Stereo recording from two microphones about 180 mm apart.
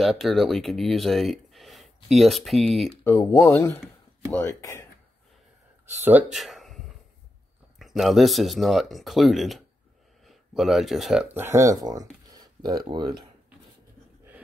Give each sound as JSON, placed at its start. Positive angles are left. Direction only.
{"t": 0.0, "sound": "speech", "side_deg": 0}
{"t": 3.0, "sound": "speech", "side_deg": 15}
{"t": 6.3, "sound": "a sound", "side_deg": 0}
{"t": 7.8, "sound": "speech", "side_deg": 0}